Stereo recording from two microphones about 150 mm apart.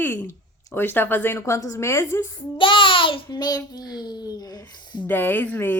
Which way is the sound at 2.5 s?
35° left (ahead or behind).